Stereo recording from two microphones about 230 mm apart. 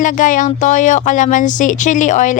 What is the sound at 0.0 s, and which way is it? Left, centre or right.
Speech, left.